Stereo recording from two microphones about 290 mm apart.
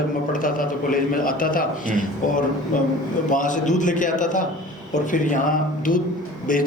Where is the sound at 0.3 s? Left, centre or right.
Left.